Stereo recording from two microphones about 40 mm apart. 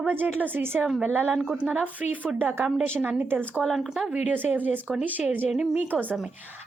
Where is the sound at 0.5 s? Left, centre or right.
Right.